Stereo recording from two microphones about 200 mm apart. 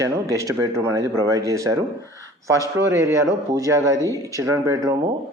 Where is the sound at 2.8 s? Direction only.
15° right (ahead or behind).